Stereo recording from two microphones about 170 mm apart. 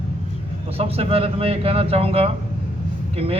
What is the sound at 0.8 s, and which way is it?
A man's voice, 35° right (ahead or behind).